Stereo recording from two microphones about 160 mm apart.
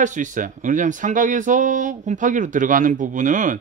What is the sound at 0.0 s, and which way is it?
Speech, 50° right (ahead or behind).